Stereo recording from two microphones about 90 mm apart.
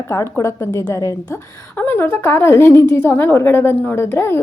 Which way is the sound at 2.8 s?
20° left (ahead or behind).